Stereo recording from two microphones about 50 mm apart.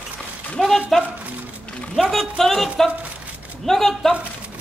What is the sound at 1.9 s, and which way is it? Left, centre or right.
Speech, centre.